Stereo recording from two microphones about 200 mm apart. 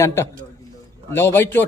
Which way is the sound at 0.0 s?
15° left (ahead or behind).